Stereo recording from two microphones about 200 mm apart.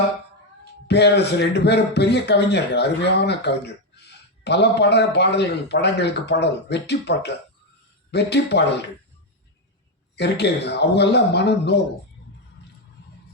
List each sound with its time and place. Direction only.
0.9 s a man's voice: 55° left (ahead or behind)
10.2 s a man's voice: 55° left (ahead or behind)